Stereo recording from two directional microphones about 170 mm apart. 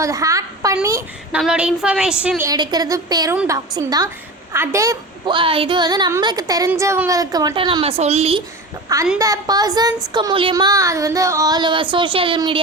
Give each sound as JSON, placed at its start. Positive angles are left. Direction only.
{"t": 0.0, "sound": "a woman's voice", "side_deg": -20}
{"t": 1.3, "sound": "a woman's voice", "side_deg": -5}
{"t": 2.5, "sound": "a woman's voice", "side_deg": -25}
{"t": 9.1, "sound": "a woman's voice", "side_deg": -20}